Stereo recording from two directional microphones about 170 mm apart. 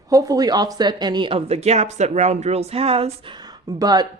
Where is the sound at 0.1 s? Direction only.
20° right (ahead or behind).